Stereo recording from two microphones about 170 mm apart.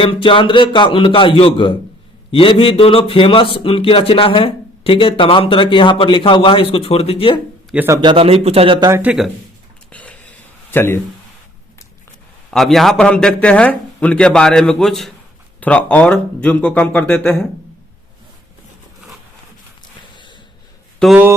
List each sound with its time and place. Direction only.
0.0 s speech: 30° left (ahead or behind)
8.0 s speech: 35° right (ahead or behind)
8.9 s speech: 10° right (ahead or behind)
9.9 s a sound: 10° left (ahead or behind)
12.5 s a man's voice: centre (ahead or behind)
21.0 s a man's voice: 5° left (ahead or behind)